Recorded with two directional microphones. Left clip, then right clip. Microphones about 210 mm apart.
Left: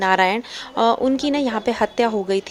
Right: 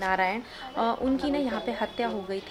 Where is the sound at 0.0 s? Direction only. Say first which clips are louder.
Left 9 dB; 50° left (ahead or behind).